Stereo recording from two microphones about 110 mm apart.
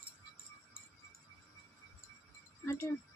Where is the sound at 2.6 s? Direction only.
25° left (ahead or behind).